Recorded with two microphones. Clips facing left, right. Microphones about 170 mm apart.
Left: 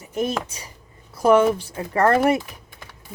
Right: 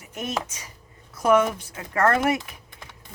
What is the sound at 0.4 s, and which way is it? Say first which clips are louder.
Speech: left 3 dB; 35° left (ahead or behind).